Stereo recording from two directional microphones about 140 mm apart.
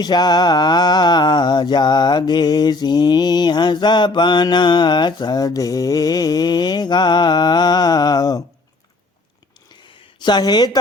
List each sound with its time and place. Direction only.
0.0 s mantra: 30° left (ahead or behind)
10.2 s a woman's voice: 30° left (ahead or behind)